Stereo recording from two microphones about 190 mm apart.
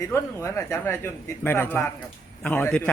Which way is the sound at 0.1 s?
15° left (ahead or behind).